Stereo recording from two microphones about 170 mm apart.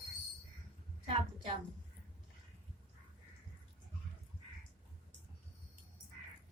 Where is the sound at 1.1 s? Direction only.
35° right (ahead or behind).